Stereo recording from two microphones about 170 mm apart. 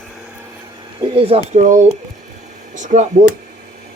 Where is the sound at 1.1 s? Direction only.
35° right (ahead or behind).